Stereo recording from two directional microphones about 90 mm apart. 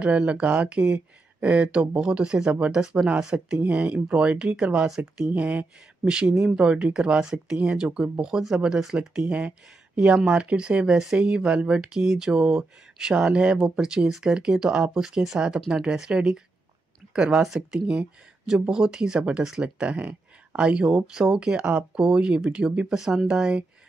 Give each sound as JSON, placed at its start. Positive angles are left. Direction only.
{"t": 0.0, "sound": "speech", "side_deg": -15}